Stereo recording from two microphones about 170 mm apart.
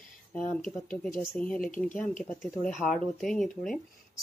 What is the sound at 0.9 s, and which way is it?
Speech, 5° left (ahead or behind).